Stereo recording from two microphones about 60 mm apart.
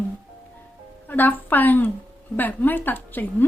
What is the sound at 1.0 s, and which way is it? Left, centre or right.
Speech, left.